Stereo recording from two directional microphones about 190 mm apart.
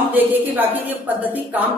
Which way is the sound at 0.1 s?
10° right (ahead or behind).